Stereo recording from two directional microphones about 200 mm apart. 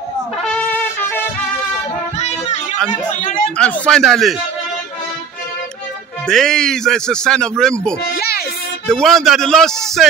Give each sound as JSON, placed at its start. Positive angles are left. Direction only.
{"t": 0.4, "sound": "music", "side_deg": 5}
{"t": 2.1, "sound": "children playing", "side_deg": 35}
{"t": 3.5, "sound": "a man's voice", "side_deg": 5}
{"t": 6.2, "sound": "a man's voice", "side_deg": 5}